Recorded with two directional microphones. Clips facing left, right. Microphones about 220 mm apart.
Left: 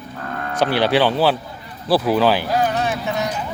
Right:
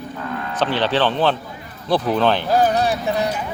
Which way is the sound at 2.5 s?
35° right (ahead or behind).